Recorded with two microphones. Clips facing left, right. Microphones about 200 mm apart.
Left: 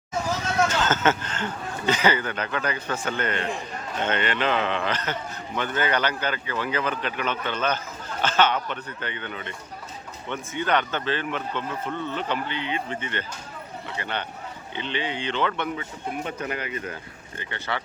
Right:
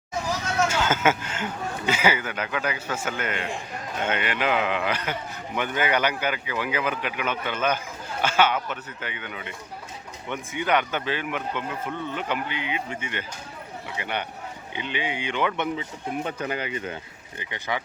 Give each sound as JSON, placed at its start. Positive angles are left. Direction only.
{"t": 0.7, "sound": "a sound", "side_deg": -10}
{"t": 1.9, "sound": "speech", "side_deg": -10}
{"t": 16.2, "sound": "speech", "side_deg": -25}
{"t": 16.9, "sound": "speech", "side_deg": -15}